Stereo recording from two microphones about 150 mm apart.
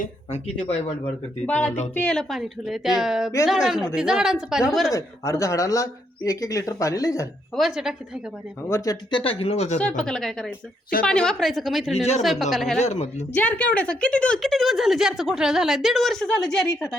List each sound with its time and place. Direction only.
1.5 s a woman's voice: 10° left (ahead or behind)
4.9 s speech: 20° left (ahead or behind)
7.5 s a woman's voice: centre (ahead or behind)
8.7 s speech: 20° left (ahead or behind); by 9.8 s 45° left (ahead or behind)
9.8 s a woman's voice: 5° left (ahead or behind)
12.8 s speech: 50° left (ahead or behind)
13.3 s a woman's voice: 10° left (ahead or behind)